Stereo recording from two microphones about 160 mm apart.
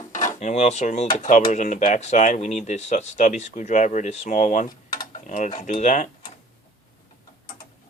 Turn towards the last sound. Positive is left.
turn(degrees=50)  # may be behind; listen again after turning